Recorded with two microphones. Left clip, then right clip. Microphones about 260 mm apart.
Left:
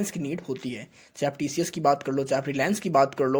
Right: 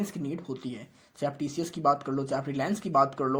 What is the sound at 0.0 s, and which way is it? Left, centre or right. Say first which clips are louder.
Speech: left 4 dB; left.